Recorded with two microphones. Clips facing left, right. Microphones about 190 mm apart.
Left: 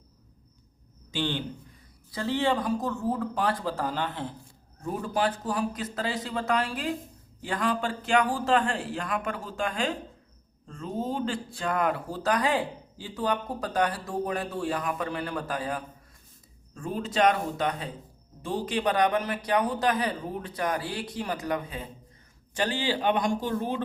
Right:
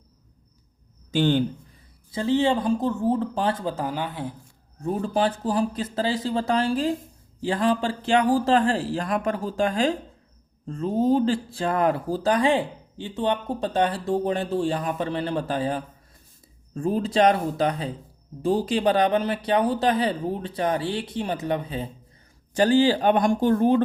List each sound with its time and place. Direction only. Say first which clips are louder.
1.1 s speech: right 9 dB; 45° right (ahead or behind)
2.1 s speech: right 5 dB; 20° right (ahead or behind)
4.9 s a man's voice: right 4 dB; 30° right (ahead or behind)
22.5 s speech: right 10 dB; 40° right (ahead or behind)